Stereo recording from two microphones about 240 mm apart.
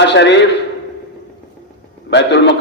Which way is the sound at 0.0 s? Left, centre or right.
Left.